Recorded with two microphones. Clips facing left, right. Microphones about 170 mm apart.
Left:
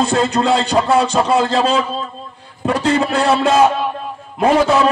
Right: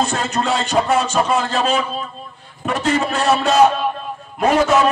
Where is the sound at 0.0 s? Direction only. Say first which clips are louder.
Left 5 dB; 30° left (ahead or behind).